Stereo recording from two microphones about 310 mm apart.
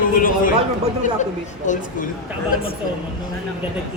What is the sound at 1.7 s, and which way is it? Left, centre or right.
Speech, left.